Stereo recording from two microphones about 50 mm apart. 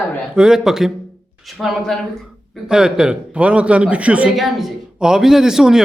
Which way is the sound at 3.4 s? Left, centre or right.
Right.